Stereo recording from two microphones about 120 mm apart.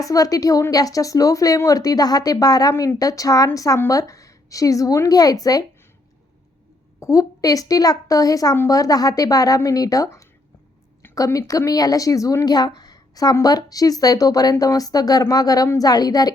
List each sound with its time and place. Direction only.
0.0 s a woman's voice: 30° left (ahead or behind)
7.0 s a woman's voice: 30° left (ahead or behind)